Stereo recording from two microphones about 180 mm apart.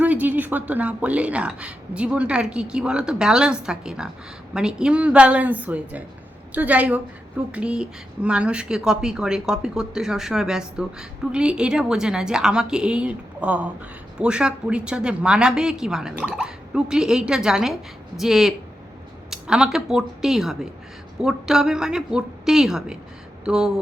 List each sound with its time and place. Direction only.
0.0 s a woman's voice: 10° right (ahead or behind)